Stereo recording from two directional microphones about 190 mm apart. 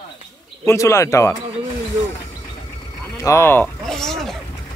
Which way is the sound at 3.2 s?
15° left (ahead or behind).